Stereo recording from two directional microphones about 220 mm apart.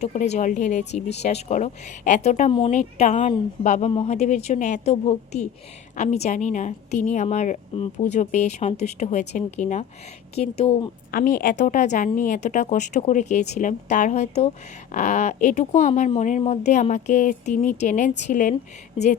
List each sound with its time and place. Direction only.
0.0 s speech: 30° left (ahead or behind)
11.1 s speech: 40° left (ahead or behind)